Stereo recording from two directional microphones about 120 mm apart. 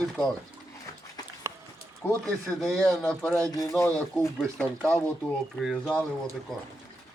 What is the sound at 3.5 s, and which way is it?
Speech, 30° left (ahead or behind).